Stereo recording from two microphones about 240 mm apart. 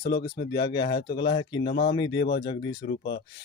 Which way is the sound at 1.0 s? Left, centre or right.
Left.